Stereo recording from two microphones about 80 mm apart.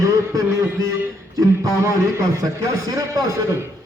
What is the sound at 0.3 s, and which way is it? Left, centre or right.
A man's voice, right.